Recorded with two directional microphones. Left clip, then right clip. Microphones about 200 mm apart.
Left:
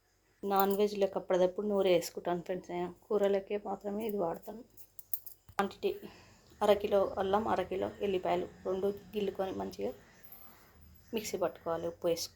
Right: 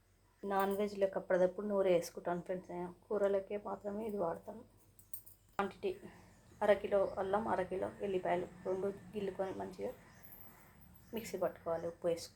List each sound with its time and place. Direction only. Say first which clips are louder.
0.4 s speech: left 6 dB; 25° left (ahead or behind)
5.6 s speech: left 5 dB; centre (ahead or behind)
6.6 s a woman's voice: left 4 dB; 30° left (ahead or behind)
11.1 s speech: left 4 dB; 25° left (ahead or behind)